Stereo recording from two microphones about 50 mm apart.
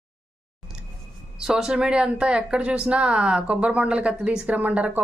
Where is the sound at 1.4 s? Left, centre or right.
Centre.